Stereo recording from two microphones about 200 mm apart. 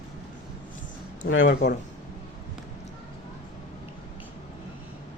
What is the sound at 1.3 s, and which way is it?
Speech, 70° left (ahead or behind).